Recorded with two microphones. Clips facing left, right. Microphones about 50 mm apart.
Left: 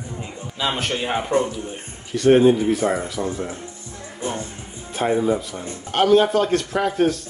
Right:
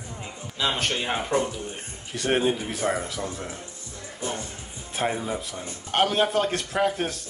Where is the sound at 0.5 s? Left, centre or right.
Centre.